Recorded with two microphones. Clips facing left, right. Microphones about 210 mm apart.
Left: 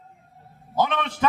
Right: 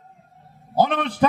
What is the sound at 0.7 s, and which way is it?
Speech, 40° right (ahead or behind).